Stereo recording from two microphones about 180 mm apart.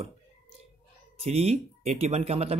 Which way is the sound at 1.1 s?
35° right (ahead or behind).